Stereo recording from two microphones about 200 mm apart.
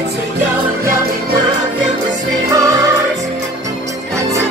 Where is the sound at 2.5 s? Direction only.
15° right (ahead or behind).